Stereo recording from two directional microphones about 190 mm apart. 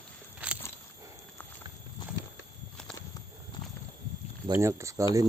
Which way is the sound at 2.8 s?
5° left (ahead or behind).